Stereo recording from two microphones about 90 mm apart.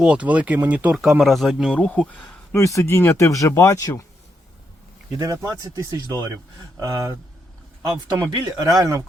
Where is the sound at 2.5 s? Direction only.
30° left (ahead or behind).